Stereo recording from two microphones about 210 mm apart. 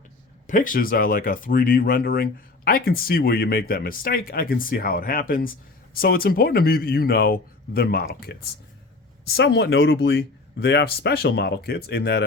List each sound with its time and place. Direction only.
0.4 s speech: 40° left (ahead or behind)